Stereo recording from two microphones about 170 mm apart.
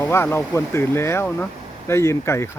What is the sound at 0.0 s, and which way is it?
Speech, 15° left (ahead or behind).